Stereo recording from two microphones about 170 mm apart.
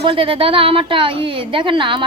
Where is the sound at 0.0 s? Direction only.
30° right (ahead or behind).